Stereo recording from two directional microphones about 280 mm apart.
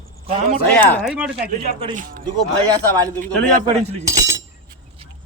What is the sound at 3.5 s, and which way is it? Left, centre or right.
Speech, right.